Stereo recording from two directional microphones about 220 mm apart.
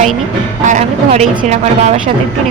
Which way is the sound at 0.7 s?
30° right (ahead or behind).